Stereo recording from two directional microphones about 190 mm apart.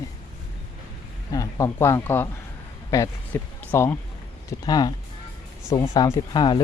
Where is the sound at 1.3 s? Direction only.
15° left (ahead or behind).